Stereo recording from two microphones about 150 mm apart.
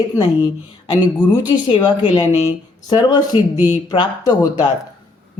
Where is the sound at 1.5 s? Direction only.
30° left (ahead or behind).